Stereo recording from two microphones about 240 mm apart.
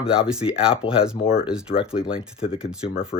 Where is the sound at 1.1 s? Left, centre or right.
Left.